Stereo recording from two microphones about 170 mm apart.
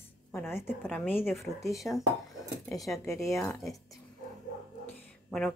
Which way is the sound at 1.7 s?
Centre (ahead or behind).